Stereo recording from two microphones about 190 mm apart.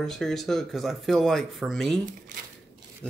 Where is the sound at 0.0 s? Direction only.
Centre (ahead or behind).